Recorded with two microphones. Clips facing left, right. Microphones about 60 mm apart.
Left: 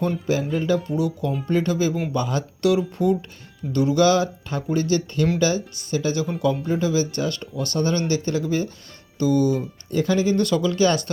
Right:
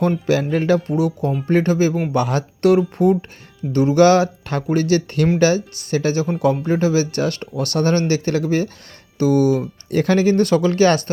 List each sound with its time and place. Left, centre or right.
0.5 s speech: right
2.1 s speech: right